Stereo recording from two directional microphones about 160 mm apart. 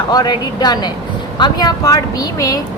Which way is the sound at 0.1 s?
25° left (ahead or behind).